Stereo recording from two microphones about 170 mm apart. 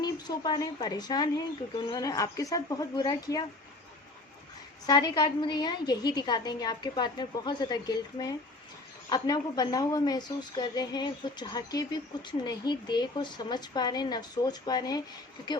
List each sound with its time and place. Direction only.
0.0 s a woman's voice: 25° left (ahead or behind)
4.9 s a woman's voice: 25° left (ahead or behind)